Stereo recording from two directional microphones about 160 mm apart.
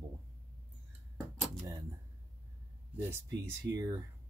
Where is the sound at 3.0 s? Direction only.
15° right (ahead or behind).